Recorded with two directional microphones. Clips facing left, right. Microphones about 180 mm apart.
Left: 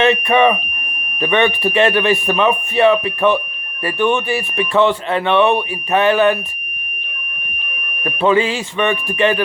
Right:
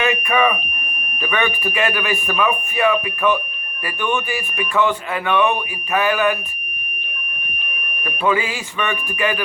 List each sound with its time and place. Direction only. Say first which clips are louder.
0.0 s speech: left 5 dB; 30° left (ahead or behind)
8.2 s speech: left 5 dB; 25° left (ahead or behind)